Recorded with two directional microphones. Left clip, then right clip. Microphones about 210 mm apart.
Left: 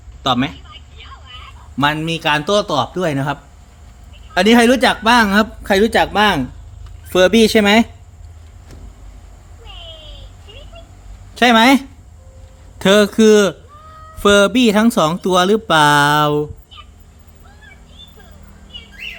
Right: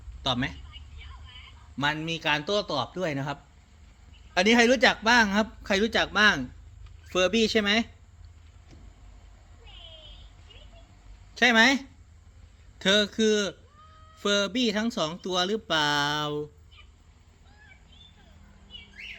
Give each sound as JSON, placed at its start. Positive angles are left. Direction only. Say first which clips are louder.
{"t": 0.2, "sound": "speech", "louder": "left 11 dB", "side_deg": 10}
{"t": 1.8, "sound": "speech", "louder": "left 11 dB", "side_deg": 10}
{"t": 4.4, "sound": "speech", "louder": "left 9 dB", "side_deg": 10}
{"t": 11.3, "sound": "speech", "louder": "left 10 dB", "side_deg": 20}